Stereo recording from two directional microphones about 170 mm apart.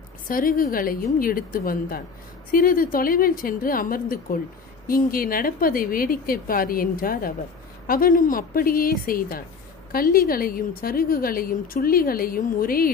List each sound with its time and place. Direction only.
0.3 s a woman's voice: 55° left (ahead or behind)